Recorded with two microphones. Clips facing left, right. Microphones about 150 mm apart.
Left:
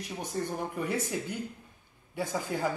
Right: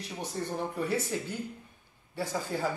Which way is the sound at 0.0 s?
15° left (ahead or behind).